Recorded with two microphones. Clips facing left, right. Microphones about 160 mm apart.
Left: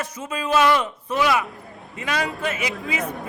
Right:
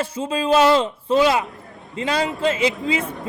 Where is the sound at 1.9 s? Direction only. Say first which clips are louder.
Right 4 dB; 30° right (ahead or behind).